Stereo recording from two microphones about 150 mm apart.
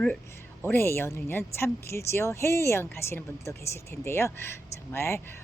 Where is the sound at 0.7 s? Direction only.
15° left (ahead or behind).